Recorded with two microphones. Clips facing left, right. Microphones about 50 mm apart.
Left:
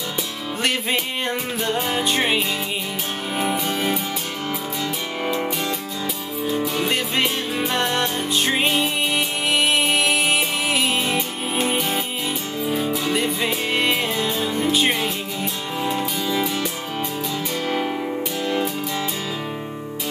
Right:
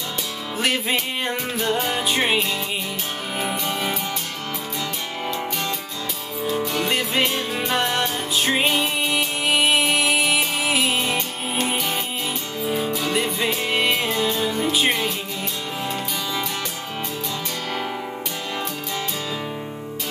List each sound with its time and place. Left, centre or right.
0.6 s music: centre
6.4 s music: centre